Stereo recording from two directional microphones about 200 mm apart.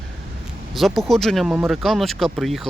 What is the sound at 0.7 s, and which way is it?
Speech, centre (ahead or behind).